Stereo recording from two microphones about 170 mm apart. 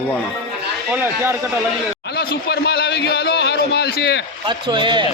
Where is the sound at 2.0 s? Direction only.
70° left (ahead or behind).